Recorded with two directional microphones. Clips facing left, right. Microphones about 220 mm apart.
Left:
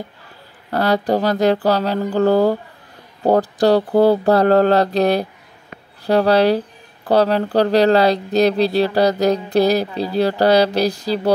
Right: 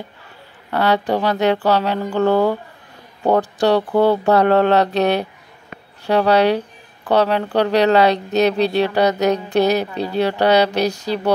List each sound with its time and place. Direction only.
0.7 s speech: 40° left (ahead or behind)